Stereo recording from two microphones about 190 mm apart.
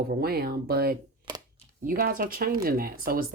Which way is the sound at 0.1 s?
55° right (ahead or behind).